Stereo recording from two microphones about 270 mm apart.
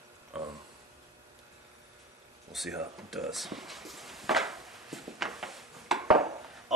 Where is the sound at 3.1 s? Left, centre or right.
Centre.